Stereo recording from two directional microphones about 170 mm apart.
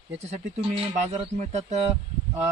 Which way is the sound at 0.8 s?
40° right (ahead or behind).